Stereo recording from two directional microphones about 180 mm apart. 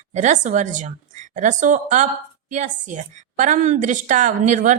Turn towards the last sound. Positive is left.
turn(degrees=-45)  # may be behind; listen again after turning